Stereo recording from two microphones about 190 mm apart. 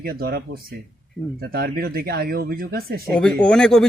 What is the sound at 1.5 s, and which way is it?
Speech, 50° right (ahead or behind).